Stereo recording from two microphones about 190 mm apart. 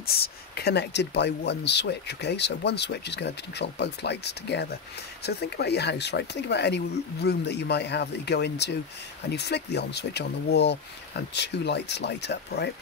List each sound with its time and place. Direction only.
0.0 s speech: 55° left (ahead or behind)